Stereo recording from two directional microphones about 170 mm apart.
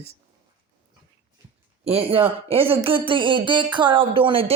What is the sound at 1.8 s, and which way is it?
A man's voice, 35° right (ahead or behind).